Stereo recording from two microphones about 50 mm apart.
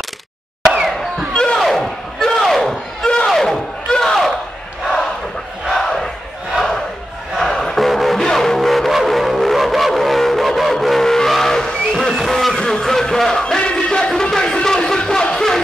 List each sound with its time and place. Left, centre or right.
1.3 s a sound: centre
1.6 s crowd: centre
3.3 s a sound: centre
5.7 s battle cry: centre
8.3 s music: centre
12.3 s a sound: centre
12.5 s music: centre
13.6 s battle cry: centre
14.3 s music: centre